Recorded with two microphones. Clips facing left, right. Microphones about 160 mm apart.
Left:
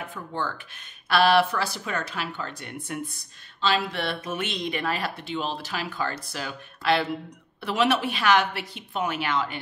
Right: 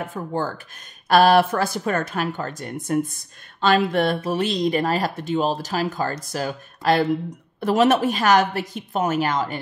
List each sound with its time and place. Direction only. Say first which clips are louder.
0.0 s speech: right 6 dB; 45° right (ahead or behind)